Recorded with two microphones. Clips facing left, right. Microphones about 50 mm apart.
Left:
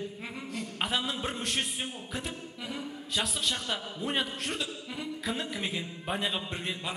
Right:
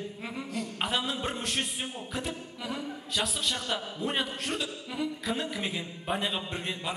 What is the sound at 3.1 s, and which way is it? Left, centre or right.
A man's voice, centre.